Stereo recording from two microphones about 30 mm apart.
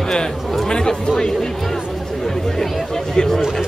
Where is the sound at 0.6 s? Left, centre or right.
Left.